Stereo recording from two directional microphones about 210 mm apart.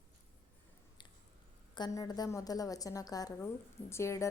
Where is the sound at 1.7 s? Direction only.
20° left (ahead or behind).